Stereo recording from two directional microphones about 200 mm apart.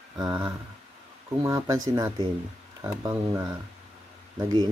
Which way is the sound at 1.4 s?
15° right (ahead or behind).